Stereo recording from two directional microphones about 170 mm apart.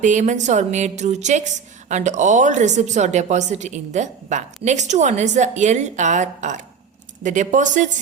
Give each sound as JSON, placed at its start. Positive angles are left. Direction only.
{"t": 0.0, "sound": "speech", "side_deg": -45}